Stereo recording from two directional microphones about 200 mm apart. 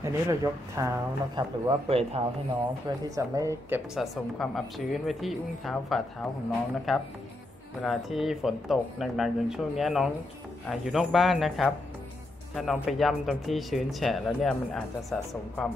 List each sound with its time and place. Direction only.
0.0 s speech: 15° right (ahead or behind)
3.2 s a woman's voice: 15° right (ahead or behind)
3.9 s speech: centre (ahead or behind)